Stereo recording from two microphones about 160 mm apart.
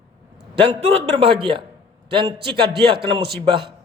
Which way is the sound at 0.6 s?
40° right (ahead or behind).